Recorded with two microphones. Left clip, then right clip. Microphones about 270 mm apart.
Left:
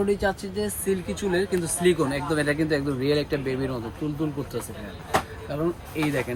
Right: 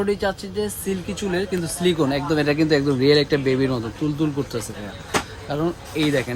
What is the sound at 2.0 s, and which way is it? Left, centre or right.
Speech, right.